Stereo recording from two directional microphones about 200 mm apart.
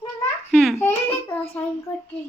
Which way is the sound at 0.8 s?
10° left (ahead or behind).